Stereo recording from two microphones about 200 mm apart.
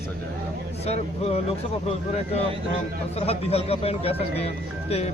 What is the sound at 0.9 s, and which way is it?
Speech, 30° left (ahead or behind).